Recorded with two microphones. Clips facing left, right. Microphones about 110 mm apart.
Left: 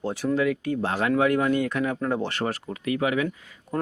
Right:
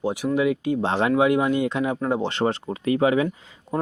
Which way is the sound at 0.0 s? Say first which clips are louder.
Right 2 dB; 15° right (ahead or behind).